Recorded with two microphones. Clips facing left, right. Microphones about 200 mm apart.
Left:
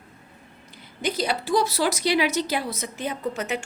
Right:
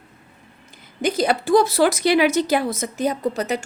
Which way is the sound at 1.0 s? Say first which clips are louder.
Right 6 dB; 50° right (ahead or behind).